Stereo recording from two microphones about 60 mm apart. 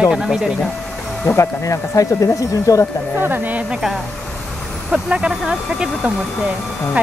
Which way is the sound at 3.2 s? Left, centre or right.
Right.